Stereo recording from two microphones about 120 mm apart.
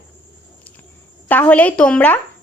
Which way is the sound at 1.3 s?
15° left (ahead or behind).